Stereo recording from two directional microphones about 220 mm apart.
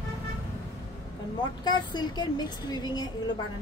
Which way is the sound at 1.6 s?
20° left (ahead or behind).